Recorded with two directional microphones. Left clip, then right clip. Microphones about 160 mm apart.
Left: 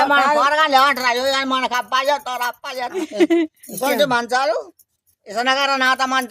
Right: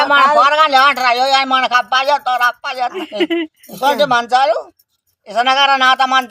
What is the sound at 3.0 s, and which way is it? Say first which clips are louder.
Speech: left 1 dB; 50° left (ahead or behind).